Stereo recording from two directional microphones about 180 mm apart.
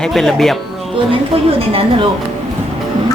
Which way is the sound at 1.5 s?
30° right (ahead or behind).